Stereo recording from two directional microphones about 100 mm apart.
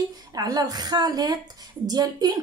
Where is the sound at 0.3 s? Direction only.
40° right (ahead or behind).